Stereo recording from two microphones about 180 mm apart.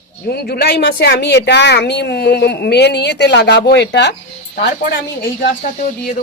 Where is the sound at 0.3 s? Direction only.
60° left (ahead or behind).